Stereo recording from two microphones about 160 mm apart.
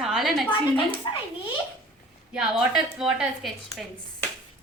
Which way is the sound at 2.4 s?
Centre (ahead or behind).